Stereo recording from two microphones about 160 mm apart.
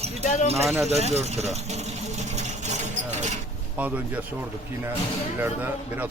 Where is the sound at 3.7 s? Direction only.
10° right (ahead or behind).